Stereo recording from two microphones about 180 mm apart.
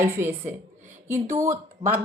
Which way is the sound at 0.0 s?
15° right (ahead or behind).